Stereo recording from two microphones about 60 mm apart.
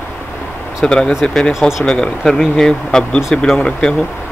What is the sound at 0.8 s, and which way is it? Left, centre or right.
Speech, centre.